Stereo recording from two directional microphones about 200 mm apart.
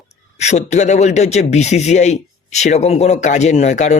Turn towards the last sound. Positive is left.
turn(degrees=35)  # may be behind; listen again after turning